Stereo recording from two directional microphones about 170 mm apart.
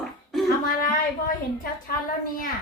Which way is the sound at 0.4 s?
55° left (ahead or behind).